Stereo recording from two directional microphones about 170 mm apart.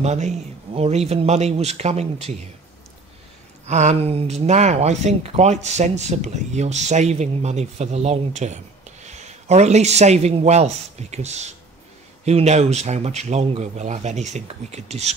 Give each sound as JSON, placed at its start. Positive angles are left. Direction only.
{"t": 0.0, "sound": "speech", "side_deg": -40}
{"t": 3.6, "sound": "speech", "side_deg": -40}